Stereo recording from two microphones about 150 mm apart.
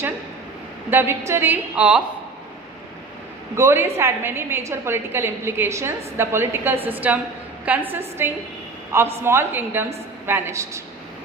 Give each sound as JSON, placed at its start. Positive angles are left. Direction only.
{"t": 0.9, "sound": "a woman's voice", "side_deg": -15}
{"t": 3.5, "sound": "a woman's voice", "side_deg": -20}